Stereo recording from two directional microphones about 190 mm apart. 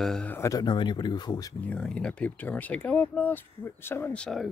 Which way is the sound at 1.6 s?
5° left (ahead or behind).